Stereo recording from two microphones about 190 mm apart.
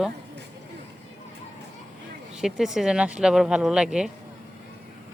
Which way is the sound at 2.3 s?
5° right (ahead or behind).